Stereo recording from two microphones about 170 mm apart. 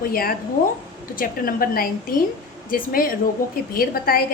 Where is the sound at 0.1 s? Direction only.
60° left (ahead or behind).